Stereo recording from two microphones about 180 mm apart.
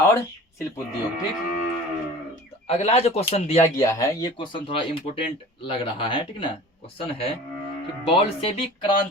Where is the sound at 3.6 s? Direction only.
15° left (ahead or behind); by 8.9 s 30° left (ahead or behind).